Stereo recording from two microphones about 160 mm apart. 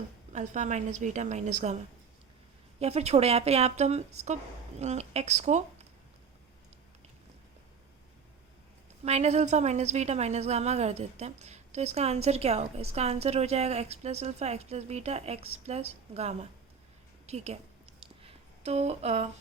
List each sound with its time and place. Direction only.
0.3 s a woman's voice: 50° right (ahead or behind)
2.8 s a woman's voice: 40° right (ahead or behind)
9.0 s a woman's voice: 45° right (ahead or behind)
18.0 s a sound: 35° right (ahead or behind)